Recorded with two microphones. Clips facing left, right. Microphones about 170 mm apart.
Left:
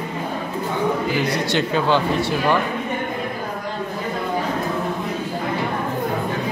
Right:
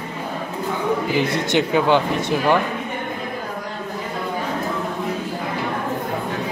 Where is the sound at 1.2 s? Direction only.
20° right (ahead or behind).